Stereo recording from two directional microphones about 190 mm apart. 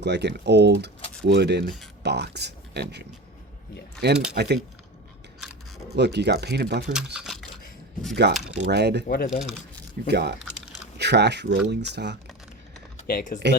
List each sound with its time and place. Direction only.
0.0 s speech: 65° right (ahead or behind)
6.0 s speech: 60° right (ahead or behind)
6.9 s camera: 5° right (ahead or behind)
8.2 s speech: 65° right (ahead or behind)
9.0 s speech: 50° left (ahead or behind)
10.1 s speech: 60° right (ahead or behind)
13.1 s speech: 45° left (ahead or behind)